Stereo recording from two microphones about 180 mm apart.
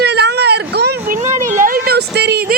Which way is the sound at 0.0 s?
65° right (ahead or behind).